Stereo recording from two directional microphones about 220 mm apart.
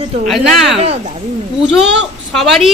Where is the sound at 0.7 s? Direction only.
30° right (ahead or behind).